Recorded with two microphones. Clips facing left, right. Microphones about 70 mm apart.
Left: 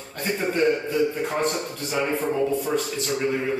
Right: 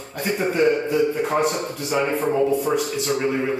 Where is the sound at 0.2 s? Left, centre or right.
Centre.